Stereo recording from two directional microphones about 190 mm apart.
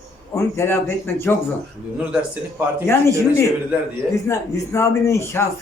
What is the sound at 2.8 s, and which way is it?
Speech, 10° left (ahead or behind).